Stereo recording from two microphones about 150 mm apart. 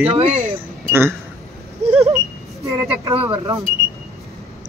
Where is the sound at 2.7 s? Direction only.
20° right (ahead or behind).